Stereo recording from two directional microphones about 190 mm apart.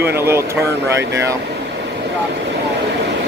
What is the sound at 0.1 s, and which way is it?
Speech, 15° right (ahead or behind).